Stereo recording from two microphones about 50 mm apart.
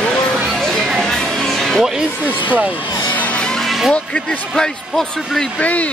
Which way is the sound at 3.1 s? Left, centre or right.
Left.